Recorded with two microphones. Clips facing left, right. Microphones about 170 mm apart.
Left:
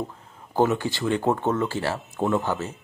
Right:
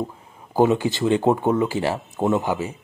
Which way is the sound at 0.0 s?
10° right (ahead or behind).